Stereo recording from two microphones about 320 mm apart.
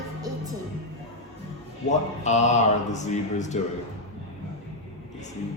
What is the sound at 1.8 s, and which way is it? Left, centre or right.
Speech, left.